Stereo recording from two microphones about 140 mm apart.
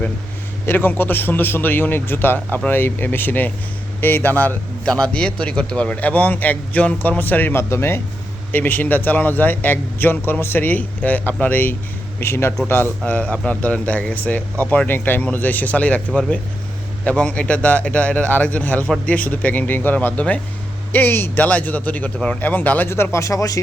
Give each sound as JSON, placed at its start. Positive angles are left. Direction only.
{"t": 0.6, "sound": "a man's voice", "side_deg": 15}